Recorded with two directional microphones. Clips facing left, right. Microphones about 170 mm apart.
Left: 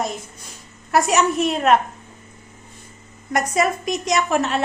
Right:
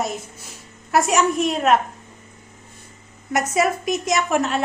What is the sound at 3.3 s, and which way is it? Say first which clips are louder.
A woman's voice: even; 5° right (ahead or behind).